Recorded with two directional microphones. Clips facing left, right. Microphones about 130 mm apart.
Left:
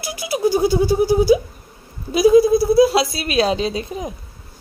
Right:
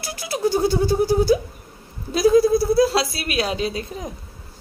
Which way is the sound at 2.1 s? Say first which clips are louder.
Left 3 dB; 15° left (ahead or behind).